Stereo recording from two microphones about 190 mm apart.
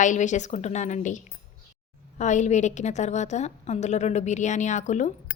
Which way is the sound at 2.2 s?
40° left (ahead or behind).